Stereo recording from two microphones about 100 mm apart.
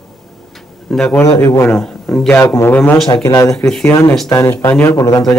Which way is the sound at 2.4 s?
25° left (ahead or behind).